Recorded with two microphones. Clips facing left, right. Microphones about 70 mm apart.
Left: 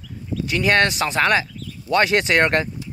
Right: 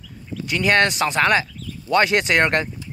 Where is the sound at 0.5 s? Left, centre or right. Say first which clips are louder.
Even; centre.